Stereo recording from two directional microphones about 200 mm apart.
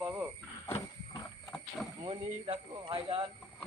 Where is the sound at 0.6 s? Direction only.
15° left (ahead or behind).